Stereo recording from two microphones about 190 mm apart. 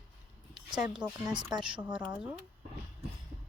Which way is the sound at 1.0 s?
5° right (ahead or behind).